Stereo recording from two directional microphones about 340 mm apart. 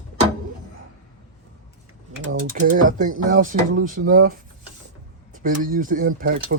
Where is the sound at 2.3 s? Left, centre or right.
Right.